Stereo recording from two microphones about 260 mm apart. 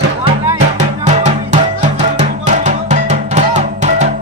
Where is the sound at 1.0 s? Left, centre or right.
Right.